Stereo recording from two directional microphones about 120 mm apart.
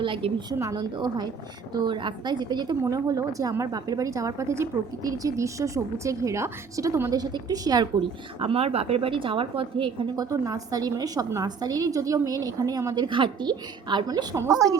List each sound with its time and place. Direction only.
0.0 s a woman's voice: 45° right (ahead or behind)
0.6 s a woman's voice: 35° right (ahead or behind)
8.4 s a woman's voice: 55° right (ahead or behind)
10.2 s a woman's voice: 30° right (ahead or behind)
14.3 s a woman's voice: 25° right (ahead or behind)